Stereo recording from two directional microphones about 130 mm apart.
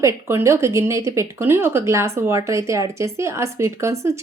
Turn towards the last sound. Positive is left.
turn(degrees=-20)  # may be behind; listen again after turning